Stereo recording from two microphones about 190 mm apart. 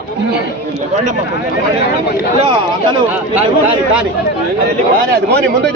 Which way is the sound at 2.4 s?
25° right (ahead or behind).